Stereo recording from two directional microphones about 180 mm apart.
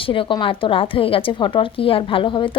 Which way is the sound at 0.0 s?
30° left (ahead or behind).